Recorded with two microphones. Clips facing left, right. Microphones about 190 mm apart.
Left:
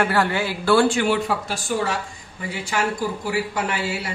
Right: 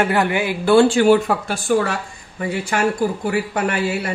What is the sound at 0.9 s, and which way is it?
Speech, 40° right (ahead or behind).